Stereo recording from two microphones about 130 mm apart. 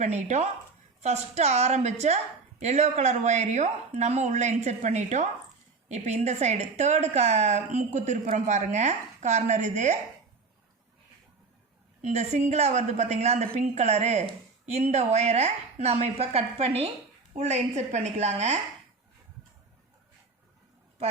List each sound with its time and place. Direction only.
0.0 s a woman's voice: 65° right (ahead or behind)
12.0 s a woman's voice: 60° right (ahead or behind)